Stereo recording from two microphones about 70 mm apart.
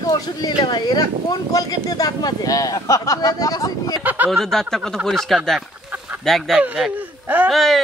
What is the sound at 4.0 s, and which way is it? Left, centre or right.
Speech, right.